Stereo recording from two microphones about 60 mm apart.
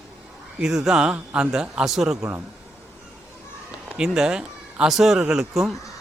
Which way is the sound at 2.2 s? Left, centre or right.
Right.